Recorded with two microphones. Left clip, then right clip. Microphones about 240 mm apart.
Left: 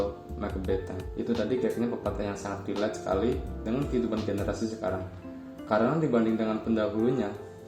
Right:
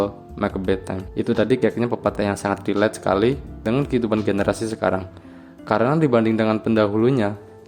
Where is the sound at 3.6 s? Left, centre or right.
Right.